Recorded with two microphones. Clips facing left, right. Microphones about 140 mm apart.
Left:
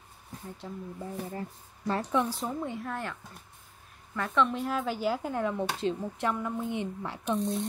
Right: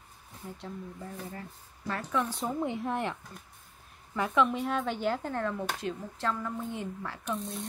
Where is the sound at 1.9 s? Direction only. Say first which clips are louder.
Left 3 dB; 25° left (ahead or behind).